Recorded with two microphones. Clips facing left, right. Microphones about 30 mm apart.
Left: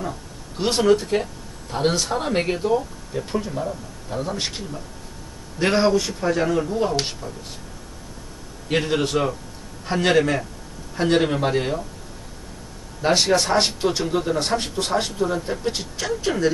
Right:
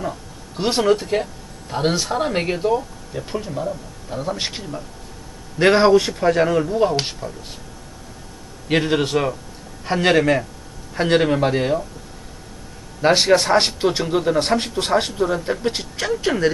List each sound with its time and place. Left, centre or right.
0.0 s speech: centre
4.4 s a man's voice: centre
5.6 s speech: right
6.6 s a man's voice: centre
8.6 s a man's voice: centre
13.0 s speech: right